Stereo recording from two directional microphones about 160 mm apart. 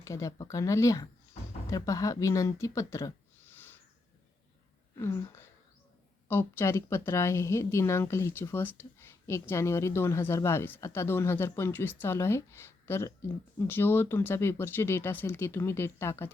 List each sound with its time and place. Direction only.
0.0 s speech: 20° left (ahead or behind)
4.9 s a woman's voice: 15° left (ahead or behind)